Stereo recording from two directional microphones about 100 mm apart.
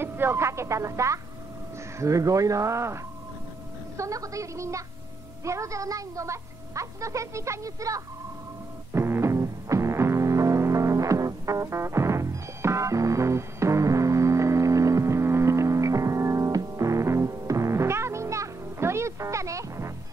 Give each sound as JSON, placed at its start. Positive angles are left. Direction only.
{"t": 0.0, "sound": "a child's voice", "side_deg": -20}
{"t": 8.9, "sound": "music", "side_deg": -25}